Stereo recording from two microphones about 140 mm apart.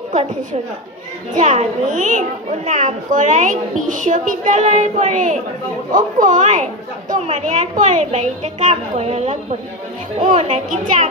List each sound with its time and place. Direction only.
1.3 s a woman's voice: 60° right (ahead or behind)